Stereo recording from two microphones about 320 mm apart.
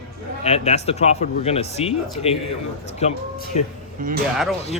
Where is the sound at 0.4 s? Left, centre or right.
Centre.